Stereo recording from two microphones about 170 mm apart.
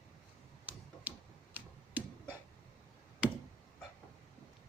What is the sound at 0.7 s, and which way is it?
Tick-tock, 10° right (ahead or behind).